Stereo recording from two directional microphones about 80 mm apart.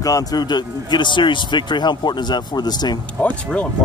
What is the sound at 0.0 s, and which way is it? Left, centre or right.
Speech, left.